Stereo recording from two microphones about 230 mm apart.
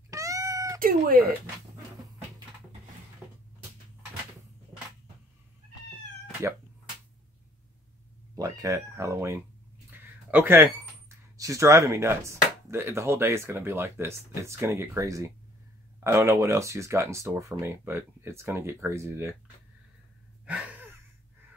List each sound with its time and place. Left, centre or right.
0.1 s cat: centre
0.7 s cat: right
8.4 s speech: centre
20.4 s a sound: centre